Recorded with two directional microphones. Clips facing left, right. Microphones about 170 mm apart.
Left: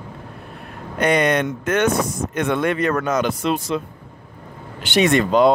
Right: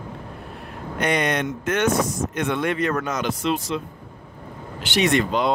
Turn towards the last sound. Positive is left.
turn(degrees=50)  # may be behind; listen again after turning